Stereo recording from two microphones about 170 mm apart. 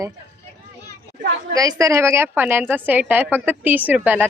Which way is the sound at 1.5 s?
20° right (ahead or behind).